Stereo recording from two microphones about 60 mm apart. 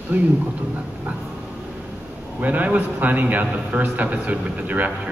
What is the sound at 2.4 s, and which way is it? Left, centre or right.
A man's voice, right.